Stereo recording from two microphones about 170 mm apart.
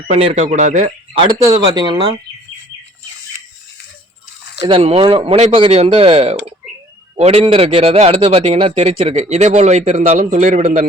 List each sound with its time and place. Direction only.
0.1 s speech: 40° right (ahead or behind)
1.2 s speech: 25° right (ahead or behind)
4.6 s a man's voice: 35° right (ahead or behind)